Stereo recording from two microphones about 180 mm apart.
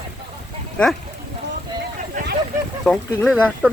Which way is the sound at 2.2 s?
45° right (ahead or behind).